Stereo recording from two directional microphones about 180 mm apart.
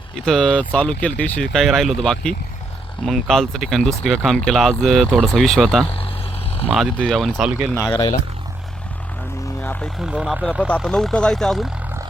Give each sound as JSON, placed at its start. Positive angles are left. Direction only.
{"t": 0.3, "sound": "speech", "side_deg": 5}
{"t": 7.9, "sound": "speech", "side_deg": 20}
{"t": 9.6, "sound": "vehicle", "side_deg": 10}
{"t": 10.0, "sound": "speech", "side_deg": -5}